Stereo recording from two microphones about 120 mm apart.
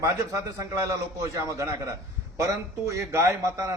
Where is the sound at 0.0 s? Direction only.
25° right (ahead or behind).